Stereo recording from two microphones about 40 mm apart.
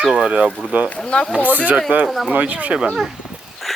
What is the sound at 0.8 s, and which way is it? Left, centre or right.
Speech, left.